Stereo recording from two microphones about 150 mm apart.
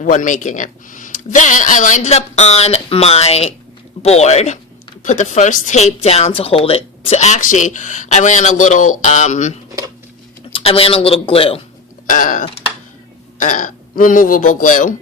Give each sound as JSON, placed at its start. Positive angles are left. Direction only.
{"t": 0.0, "sound": "speech", "side_deg": 60}
{"t": 10.5, "sound": "a man's voice", "side_deg": 40}
{"t": 12.0, "sound": "a sound", "side_deg": 60}
{"t": 13.4, "sound": "speech", "side_deg": 60}